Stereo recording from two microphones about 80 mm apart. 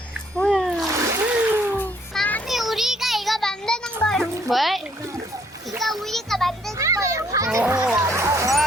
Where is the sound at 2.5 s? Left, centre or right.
Centre.